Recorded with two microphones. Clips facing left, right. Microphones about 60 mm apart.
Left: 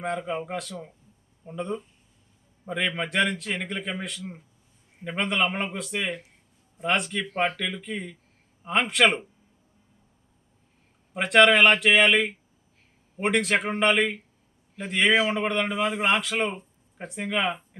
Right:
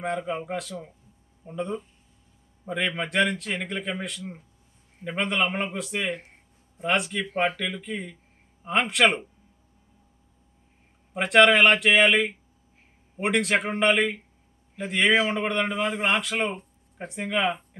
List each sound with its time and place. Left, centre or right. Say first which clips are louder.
0.0 s speech: even; centre
6.1 s speech: even; right
6.7 s speech: even; centre
11.1 s speech: even; centre